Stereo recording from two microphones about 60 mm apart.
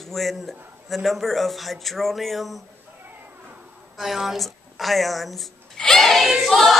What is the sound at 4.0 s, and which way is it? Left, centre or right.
A woman's voice, centre.